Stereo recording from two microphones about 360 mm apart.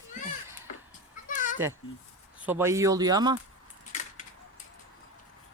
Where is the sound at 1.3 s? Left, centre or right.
Left.